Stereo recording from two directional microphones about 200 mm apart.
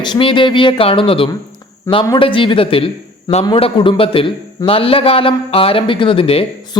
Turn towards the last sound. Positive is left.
turn(degrees=30)  # may be behind; listen again after turning